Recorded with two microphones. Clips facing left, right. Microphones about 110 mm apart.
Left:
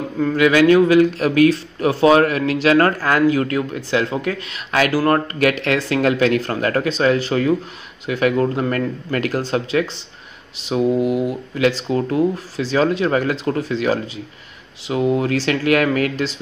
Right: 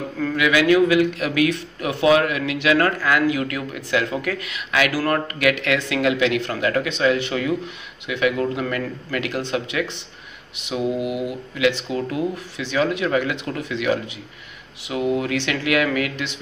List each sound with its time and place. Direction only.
0.2 s speech: 30° left (ahead or behind)